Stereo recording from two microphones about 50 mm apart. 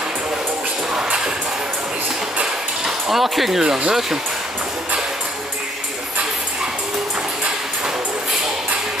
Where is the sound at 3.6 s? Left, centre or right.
Centre.